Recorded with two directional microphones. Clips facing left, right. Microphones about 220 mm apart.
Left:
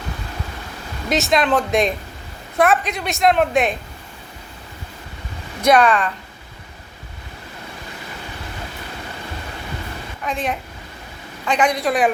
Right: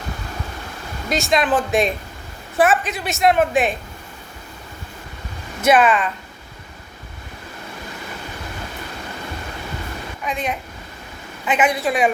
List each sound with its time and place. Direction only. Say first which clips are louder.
1.1 s a woman's voice: left 1 dB; centre (ahead or behind)
5.6 s a woman's voice: left 1 dB; 5° right (ahead or behind)
10.2 s a woman's voice: left 1 dB; centre (ahead or behind)